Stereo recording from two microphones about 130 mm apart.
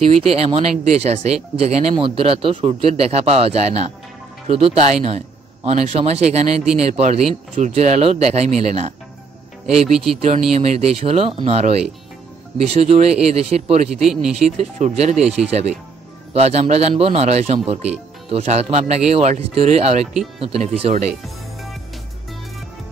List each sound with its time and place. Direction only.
0.0 s speech: 45° right (ahead or behind)
2.0 s speech: 45° right (ahead or behind)
9.7 s speech: 5° right (ahead or behind)
10.5 s speech: 55° right (ahead or behind)
12.9 s speech: 55° right (ahead or behind)
14.0 s speech: 5° right (ahead or behind)
14.4 s speech: 55° right (ahead or behind)
15.4 s speech: 5° right (ahead or behind)
16.3 s speech: 55° right (ahead or behind)